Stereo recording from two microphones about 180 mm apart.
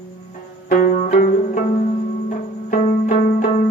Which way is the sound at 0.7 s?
50° left (ahead or behind).